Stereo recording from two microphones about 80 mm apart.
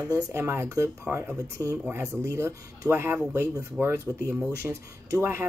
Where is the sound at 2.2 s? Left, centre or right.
Right.